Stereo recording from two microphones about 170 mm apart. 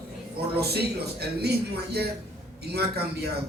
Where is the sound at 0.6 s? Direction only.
70° right (ahead or behind).